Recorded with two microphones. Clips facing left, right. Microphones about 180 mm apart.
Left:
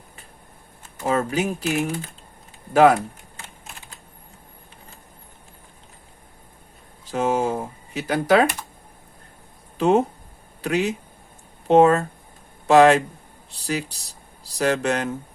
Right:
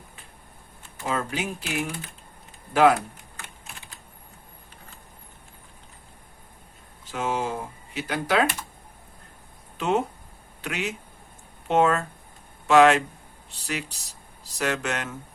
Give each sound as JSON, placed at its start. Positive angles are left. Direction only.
{"t": 1.0, "sound": "speech", "side_deg": 45}
{"t": 7.1, "sound": "speech", "side_deg": 40}
{"t": 9.7, "sound": "speech", "side_deg": 40}